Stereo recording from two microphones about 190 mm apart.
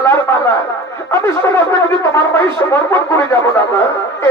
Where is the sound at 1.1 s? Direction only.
15° left (ahead or behind).